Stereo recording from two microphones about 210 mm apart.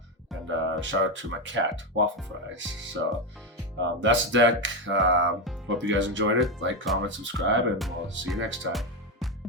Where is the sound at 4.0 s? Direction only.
60° right (ahead or behind).